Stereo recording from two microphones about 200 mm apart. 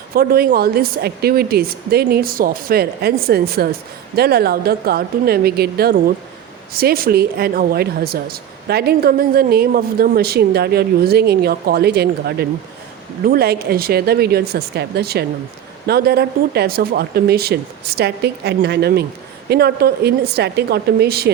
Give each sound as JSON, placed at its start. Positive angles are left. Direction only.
{"t": 0.1, "sound": "a woman's voice", "side_deg": -50}